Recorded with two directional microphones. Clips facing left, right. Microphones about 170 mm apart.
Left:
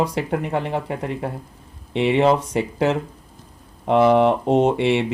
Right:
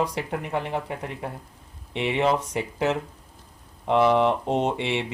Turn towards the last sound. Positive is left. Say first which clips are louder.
# left 8 dB
turn(degrees=60)  # may be behind; listen again after turning